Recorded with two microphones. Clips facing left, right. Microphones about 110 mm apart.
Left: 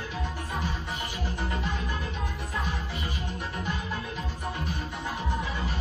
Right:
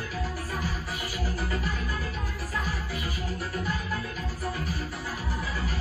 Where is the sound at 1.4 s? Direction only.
25° left (ahead or behind).